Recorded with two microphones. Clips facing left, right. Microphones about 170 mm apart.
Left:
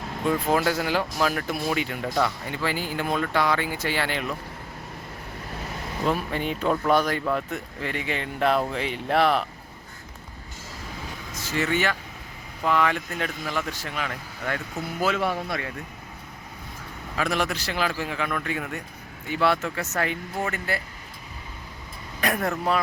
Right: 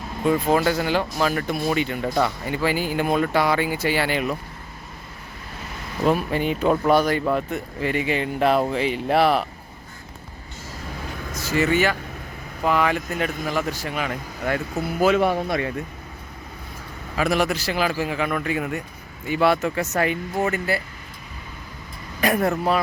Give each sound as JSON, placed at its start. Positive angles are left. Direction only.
{"t": 0.3, "sound": "speech", "side_deg": 0}
{"t": 2.1, "sound": "speech", "side_deg": -10}
{"t": 6.1, "sound": "speech", "side_deg": -5}
{"t": 11.5, "sound": "speech", "side_deg": -5}
{"t": 13.3, "sound": "a man's voice", "side_deg": -50}
{"t": 13.6, "sound": "speech", "side_deg": -10}
{"t": 17.2, "sound": "speech", "side_deg": -10}
{"t": 22.2, "sound": "speech", "side_deg": -5}